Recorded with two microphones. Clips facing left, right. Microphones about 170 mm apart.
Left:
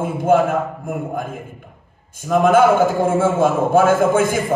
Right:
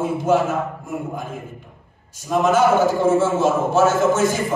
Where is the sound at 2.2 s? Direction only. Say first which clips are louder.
Left 3 dB; 55° left (ahead or behind).